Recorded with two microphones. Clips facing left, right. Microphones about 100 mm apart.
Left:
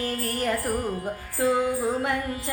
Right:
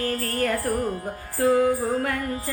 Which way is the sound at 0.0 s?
25° left (ahead or behind).